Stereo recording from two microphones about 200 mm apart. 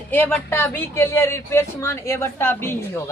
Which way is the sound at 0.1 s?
10° left (ahead or behind).